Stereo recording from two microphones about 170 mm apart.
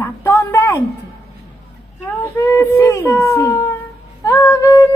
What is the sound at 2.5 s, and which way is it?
A woman's voice, 15° left (ahead or behind).